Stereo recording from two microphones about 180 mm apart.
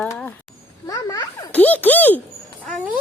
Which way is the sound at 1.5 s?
10° left (ahead or behind).